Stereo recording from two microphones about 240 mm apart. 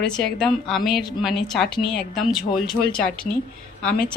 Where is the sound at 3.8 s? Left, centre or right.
Centre.